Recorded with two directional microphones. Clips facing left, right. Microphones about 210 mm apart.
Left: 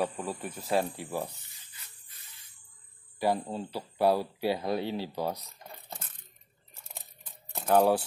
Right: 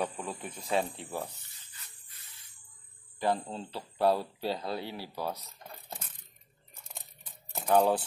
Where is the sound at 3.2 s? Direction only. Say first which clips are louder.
Left 2 dB; 10° left (ahead or behind).